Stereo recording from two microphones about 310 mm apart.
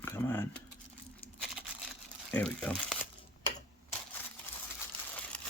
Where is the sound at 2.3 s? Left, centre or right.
Centre.